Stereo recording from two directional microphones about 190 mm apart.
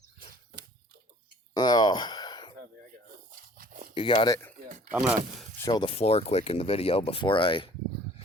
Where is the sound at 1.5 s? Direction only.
20° left (ahead or behind).